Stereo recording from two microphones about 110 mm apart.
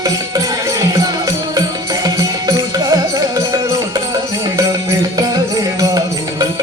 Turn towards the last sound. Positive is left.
turn(degrees=-35)  # may be behind; listen again after turning